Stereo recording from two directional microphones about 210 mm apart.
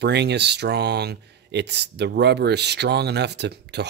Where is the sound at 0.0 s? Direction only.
55° right (ahead or behind).